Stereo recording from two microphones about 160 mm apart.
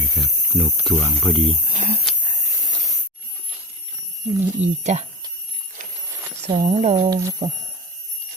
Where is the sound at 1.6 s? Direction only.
50° right (ahead or behind).